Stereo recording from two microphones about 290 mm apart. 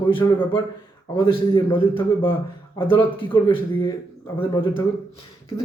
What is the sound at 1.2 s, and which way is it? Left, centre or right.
Speech, centre.